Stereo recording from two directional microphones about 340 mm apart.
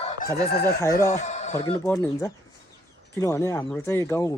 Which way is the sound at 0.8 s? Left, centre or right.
Centre.